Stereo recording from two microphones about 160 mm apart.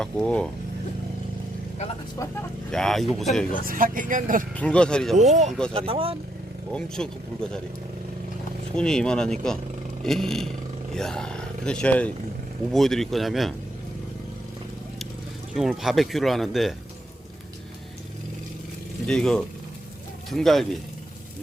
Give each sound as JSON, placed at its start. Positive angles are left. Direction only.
{"t": 0.0, "sound": "speech", "side_deg": 5}
{"t": 2.7, "sound": "speech", "side_deg": 0}
{"t": 3.6, "sound": "speech", "side_deg": -60}
{"t": 4.5, "sound": "speech", "side_deg": 5}
{"t": 5.2, "sound": "speech", "side_deg": -45}
{"t": 5.7, "sound": "speech", "side_deg": -35}
{"t": 6.7, "sound": "speech", "side_deg": 5}
{"t": 8.7, "sound": "speech", "side_deg": 5}
{"t": 15.5, "sound": "speech", "side_deg": 0}
{"t": 19.0, "sound": "speech", "side_deg": 5}